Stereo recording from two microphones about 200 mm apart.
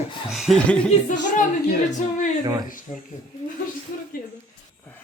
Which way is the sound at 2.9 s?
35° left (ahead or behind).